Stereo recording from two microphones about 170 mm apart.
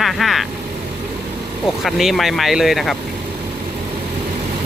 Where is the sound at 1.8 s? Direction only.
Centre (ahead or behind).